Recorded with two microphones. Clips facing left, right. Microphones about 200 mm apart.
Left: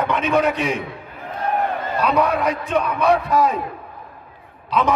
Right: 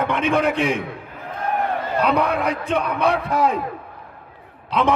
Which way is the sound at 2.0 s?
60° right (ahead or behind).